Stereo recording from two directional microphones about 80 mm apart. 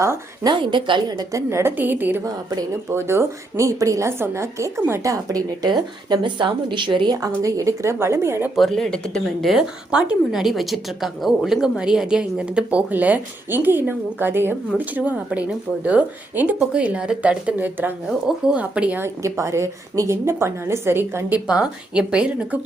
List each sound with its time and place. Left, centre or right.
0.4 s speech: right
1.0 s a woman's voice: right
1.7 s speech: right
2.2 s a woman's voice: right
2.9 s a woman's voice: right
5.6 s speech: right
7.1 s a woman's voice: right
8.5 s speech: centre
18.9 s a woman's voice: right
21.4 s speech: centre